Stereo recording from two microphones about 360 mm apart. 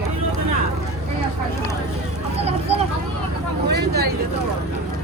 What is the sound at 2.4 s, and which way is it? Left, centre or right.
Vehicle, centre.